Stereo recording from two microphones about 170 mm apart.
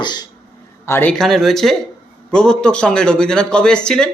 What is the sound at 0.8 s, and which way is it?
Speech, 15° left (ahead or behind).